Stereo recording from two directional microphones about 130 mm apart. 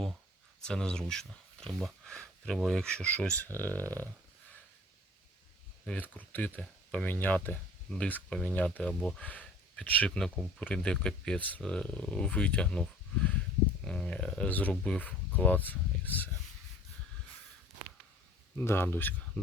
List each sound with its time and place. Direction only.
0.6 s speech: 5° left (ahead or behind)
3.8 s dog: 25° right (ahead or behind)
5.8 s speech: 10° left (ahead or behind)
18.5 s speech: 20° left (ahead or behind)